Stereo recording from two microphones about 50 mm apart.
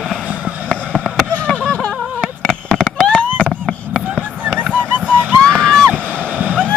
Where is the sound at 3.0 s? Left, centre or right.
Left.